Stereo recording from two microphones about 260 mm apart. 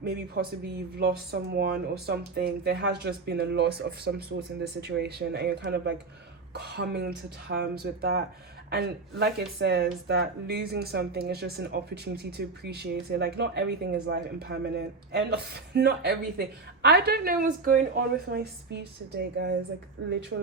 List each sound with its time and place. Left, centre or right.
0.0 s speech: right